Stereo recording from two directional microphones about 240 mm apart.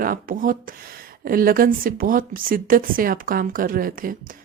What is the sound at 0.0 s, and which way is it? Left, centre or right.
A woman's voice, right.